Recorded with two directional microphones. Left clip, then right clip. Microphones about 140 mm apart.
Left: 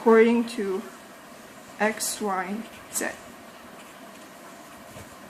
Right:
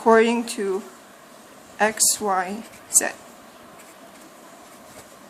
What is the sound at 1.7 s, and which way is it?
Speech, 45° right (ahead or behind).